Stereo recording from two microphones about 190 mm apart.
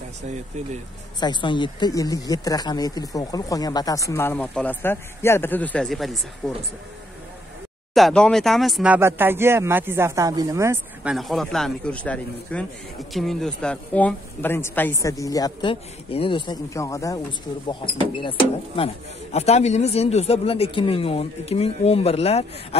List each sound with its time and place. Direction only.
1.2 s a man's voice: 25° left (ahead or behind); by 6.6 s 5° left (ahead or behind)
7.9 s speech: centre (ahead or behind); by 11.1 s 15° right (ahead or behind)
11.1 s a man's voice: centre (ahead or behind); by 18.3 s 25° left (ahead or behind)
19.3 s speech: 35° left (ahead or behind)